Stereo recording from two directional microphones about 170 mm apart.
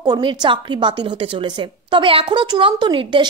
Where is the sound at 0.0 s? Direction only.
25° right (ahead or behind).